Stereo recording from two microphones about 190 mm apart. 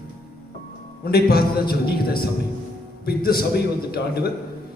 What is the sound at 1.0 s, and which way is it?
A man's voice, 55° left (ahead or behind).